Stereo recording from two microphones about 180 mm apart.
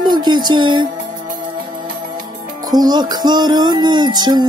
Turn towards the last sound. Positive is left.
turn(degrees=-25)  # may be behind; listen again after turning